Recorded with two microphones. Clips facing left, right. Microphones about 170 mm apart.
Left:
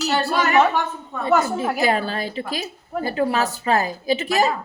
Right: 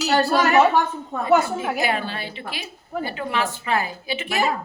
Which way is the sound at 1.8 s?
40° left (ahead or behind).